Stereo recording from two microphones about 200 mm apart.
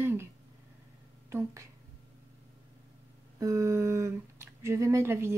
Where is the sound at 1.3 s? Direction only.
15° right (ahead or behind).